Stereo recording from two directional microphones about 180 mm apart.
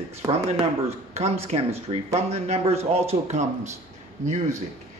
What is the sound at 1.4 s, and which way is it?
Speech, 35° right (ahead or behind).